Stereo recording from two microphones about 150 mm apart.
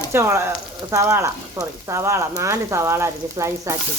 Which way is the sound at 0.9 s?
20° right (ahead or behind).